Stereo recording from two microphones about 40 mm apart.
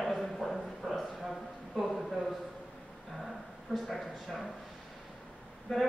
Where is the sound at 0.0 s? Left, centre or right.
Centre.